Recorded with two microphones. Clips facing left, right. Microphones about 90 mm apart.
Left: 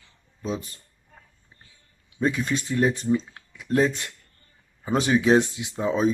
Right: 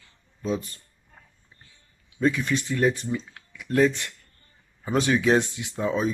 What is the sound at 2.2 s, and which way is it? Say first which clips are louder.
Speech: right 1 dB; 25° left (ahead or behind).